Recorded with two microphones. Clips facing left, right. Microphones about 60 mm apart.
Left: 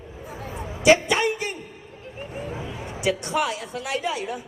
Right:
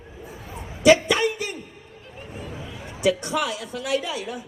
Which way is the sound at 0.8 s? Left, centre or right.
Left.